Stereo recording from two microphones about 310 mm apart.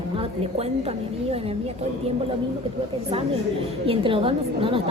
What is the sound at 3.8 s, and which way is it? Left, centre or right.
Speech, centre.